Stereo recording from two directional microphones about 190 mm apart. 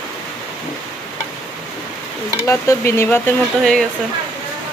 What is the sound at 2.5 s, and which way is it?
Speech, 15° left (ahead or behind).